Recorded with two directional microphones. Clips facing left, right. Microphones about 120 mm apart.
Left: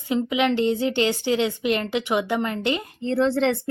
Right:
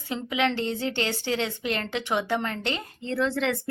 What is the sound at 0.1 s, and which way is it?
A woman's voice, 15° left (ahead or behind).